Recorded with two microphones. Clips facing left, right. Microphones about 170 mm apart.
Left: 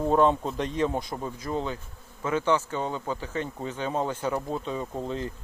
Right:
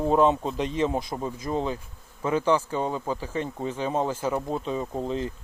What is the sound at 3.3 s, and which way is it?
Speech, 30° right (ahead or behind).